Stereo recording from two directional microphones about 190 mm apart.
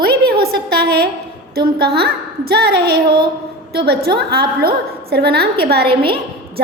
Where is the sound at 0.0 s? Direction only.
55° right (ahead or behind).